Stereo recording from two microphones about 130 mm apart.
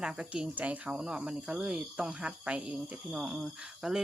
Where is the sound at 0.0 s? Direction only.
5° right (ahead or behind).